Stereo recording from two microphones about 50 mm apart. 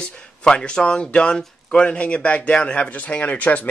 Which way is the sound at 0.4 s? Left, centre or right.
Centre.